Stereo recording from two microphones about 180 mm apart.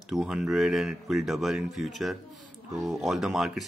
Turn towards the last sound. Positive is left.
turn(degrees=0)  # may be behind; listen again after turning